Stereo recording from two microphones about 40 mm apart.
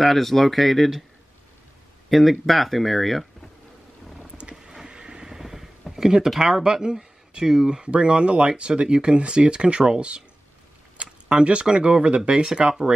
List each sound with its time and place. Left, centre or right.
0.0 s speech: centre
2.0 s speech: centre
4.4 s vehicle: right
4.7 s a sound: centre
6.0 s speech: centre